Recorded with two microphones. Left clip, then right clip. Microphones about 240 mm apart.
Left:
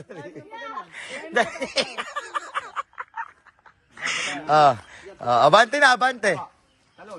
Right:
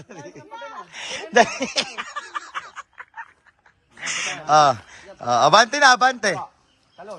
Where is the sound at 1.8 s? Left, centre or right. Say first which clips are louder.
Even; centre.